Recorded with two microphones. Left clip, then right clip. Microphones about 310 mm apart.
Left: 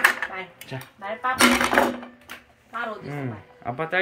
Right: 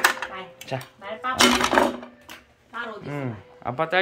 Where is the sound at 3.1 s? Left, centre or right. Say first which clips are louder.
Right 1 dB; centre.